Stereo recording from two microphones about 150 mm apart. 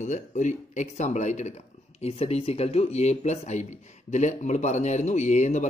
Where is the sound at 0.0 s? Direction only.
55° left (ahead or behind).